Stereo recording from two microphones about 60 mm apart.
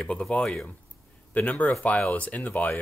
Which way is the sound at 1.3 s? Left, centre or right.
Left.